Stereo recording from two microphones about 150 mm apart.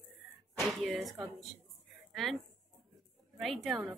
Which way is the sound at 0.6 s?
Centre (ahead or behind).